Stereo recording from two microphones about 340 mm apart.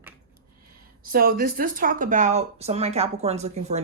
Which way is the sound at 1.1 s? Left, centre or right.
Right.